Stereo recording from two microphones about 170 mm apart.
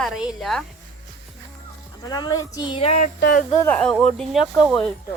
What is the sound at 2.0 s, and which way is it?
Speech, 20° left (ahead or behind).